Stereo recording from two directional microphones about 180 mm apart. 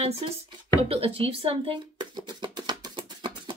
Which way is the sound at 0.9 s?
30° right (ahead or behind).